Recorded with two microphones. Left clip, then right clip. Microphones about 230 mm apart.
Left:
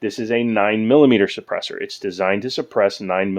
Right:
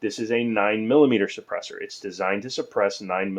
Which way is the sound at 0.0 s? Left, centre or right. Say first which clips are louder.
Left 4 dB; left.